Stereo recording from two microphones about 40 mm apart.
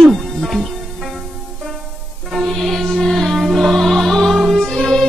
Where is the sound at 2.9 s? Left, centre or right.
Centre.